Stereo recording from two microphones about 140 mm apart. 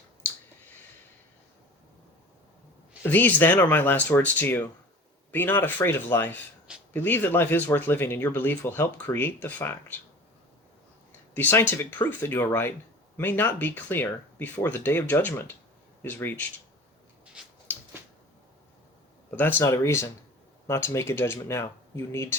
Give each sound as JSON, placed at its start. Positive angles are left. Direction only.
{"t": 3.0, "sound": "speech", "side_deg": 15}
{"t": 11.3, "sound": "speech", "side_deg": 15}
{"t": 19.4, "sound": "speech", "side_deg": 15}